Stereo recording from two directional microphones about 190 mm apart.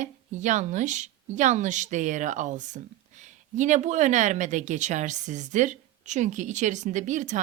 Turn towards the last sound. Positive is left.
turn(degrees=-40)  # may be behind; listen again after turning